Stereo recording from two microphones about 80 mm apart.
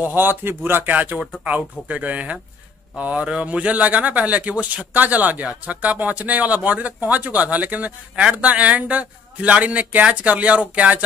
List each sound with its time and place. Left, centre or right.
0.0 s speech: right